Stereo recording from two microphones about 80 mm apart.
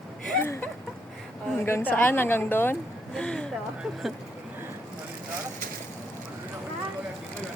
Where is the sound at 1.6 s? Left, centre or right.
Left.